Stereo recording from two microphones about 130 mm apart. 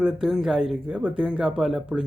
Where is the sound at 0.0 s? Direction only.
5° right (ahead or behind).